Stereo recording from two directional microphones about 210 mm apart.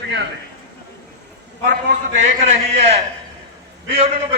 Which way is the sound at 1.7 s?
35° right (ahead or behind).